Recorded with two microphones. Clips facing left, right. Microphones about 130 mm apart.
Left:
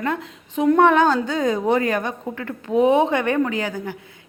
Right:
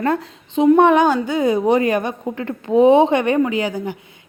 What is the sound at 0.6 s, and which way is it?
A woman's voice, 20° right (ahead or behind).